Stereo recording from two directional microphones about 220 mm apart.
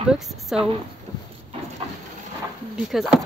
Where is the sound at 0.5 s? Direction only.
5° right (ahead or behind).